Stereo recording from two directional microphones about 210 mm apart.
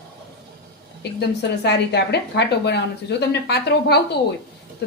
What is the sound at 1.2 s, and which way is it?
A woman's voice, 55° left (ahead or behind).